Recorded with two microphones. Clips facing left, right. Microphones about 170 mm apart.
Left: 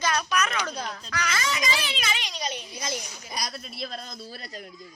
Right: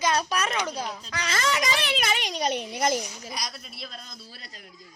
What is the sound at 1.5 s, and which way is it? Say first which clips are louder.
A child's voice: right 3 dB; 60° right (ahead or behind).